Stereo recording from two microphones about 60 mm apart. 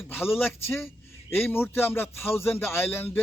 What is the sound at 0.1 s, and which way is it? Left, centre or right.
A man's voice, left.